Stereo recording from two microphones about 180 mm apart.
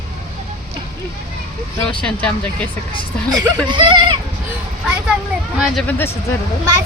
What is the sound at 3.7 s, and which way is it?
Speech, 25° right (ahead or behind).